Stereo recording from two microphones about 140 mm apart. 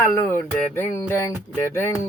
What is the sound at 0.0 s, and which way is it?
Music, 20° left (ahead or behind).